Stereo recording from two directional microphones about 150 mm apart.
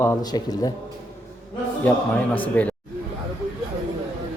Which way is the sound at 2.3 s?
10° left (ahead or behind).